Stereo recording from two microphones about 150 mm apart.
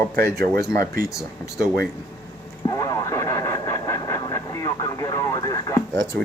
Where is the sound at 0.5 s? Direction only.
25° left (ahead or behind).